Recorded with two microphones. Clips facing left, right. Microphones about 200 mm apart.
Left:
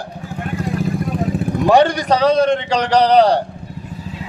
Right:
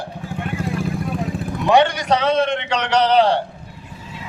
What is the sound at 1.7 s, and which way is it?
A man's voice, 40° left (ahead or behind).